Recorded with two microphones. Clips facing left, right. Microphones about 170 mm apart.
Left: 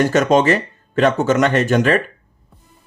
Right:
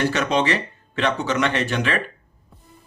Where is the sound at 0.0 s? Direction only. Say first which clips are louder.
Left 7 dB; 45° left (ahead or behind).